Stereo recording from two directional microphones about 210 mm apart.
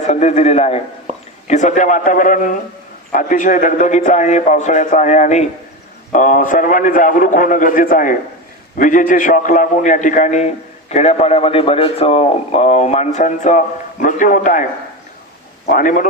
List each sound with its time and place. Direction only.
0.0 s a man's voice: 30° left (ahead or behind)
1.1 s a sound: 30° right (ahead or behind)
1.5 s a man's voice: 35° left (ahead or behind)